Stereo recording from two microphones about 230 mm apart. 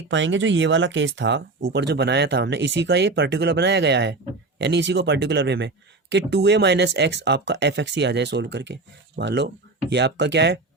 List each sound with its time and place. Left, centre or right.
0.1 s speech: right